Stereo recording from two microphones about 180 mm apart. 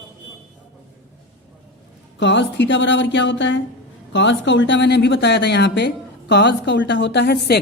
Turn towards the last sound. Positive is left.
turn(degrees=70)  # may be behind; listen again after turning